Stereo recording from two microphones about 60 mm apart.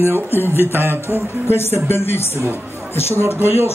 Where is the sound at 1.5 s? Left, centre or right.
Left.